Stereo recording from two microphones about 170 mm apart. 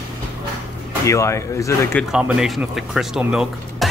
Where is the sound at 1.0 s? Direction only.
15° left (ahead or behind).